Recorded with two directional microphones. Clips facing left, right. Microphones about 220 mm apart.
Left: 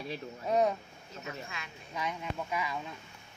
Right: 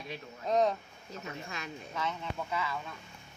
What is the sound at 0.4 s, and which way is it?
Speech, 10° left (ahead or behind).